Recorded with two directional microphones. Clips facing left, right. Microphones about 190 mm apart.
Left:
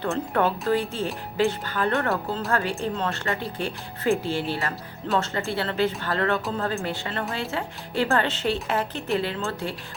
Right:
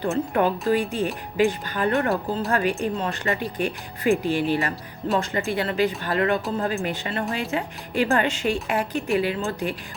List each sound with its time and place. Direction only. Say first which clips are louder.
0.0 s speech: right 2 dB; 15° right (ahead or behind)